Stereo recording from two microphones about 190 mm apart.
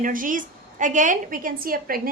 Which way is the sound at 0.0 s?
45° right (ahead or behind).